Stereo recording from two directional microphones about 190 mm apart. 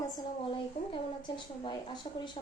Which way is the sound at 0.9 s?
25° left (ahead or behind).